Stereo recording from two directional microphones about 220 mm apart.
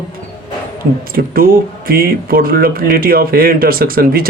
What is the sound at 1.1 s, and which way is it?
Speech, 40° right (ahead or behind).